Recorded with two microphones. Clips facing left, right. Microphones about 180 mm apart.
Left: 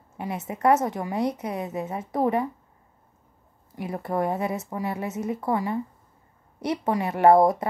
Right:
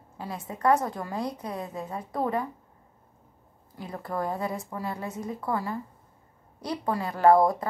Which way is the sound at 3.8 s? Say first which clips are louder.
Left 5 dB; 25° left (ahead or behind).